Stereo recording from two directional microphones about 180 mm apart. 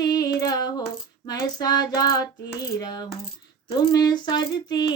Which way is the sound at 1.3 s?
20° left (ahead or behind).